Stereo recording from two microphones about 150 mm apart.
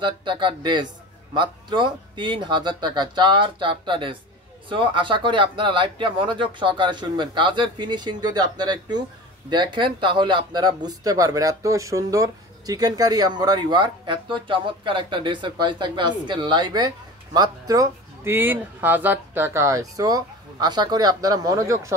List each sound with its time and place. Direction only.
0.0 s speech: 30° right (ahead or behind)